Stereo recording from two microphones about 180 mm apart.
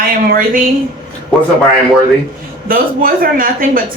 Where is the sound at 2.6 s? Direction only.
55° right (ahead or behind).